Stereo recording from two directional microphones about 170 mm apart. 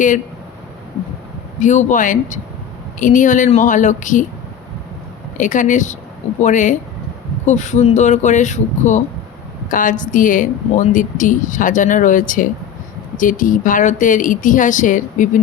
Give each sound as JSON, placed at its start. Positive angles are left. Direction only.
{"t": 1.5, "sound": "a woman's voice", "side_deg": 45}
{"t": 5.4, "sound": "a woman's voice", "side_deg": 50}